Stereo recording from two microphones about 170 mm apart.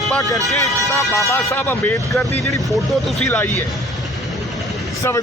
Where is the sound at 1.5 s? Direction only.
15° left (ahead or behind).